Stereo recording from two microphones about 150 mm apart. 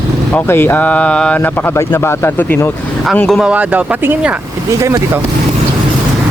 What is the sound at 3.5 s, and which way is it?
Speech, 10° right (ahead or behind).